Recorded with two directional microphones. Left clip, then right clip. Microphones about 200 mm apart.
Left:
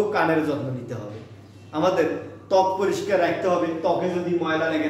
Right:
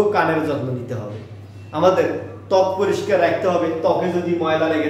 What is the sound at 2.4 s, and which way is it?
A man's voice, 10° left (ahead or behind).